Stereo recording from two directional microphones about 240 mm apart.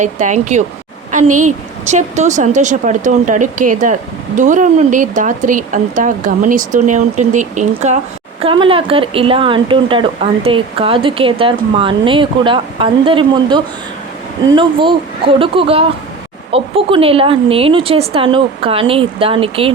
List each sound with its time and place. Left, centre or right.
0.0 s a woman's voice: right